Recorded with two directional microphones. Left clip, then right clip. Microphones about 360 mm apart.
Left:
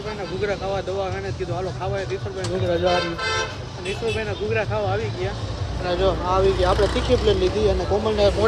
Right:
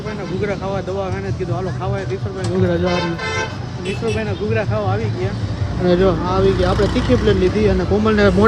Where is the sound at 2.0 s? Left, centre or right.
Centre.